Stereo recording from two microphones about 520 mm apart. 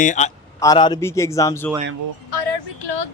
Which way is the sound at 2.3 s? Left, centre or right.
Left.